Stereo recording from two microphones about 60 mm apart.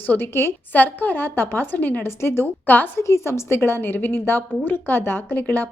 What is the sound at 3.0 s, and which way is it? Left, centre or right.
A woman's voice, left.